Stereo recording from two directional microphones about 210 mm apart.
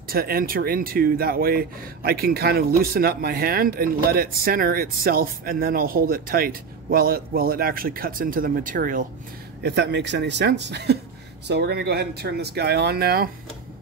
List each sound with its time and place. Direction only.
0.1 s speech: 45° right (ahead or behind)
9.6 s speech: 50° right (ahead or behind)